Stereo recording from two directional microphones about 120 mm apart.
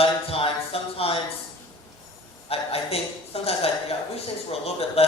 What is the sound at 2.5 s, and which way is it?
A woman's voice, 55° left (ahead or behind).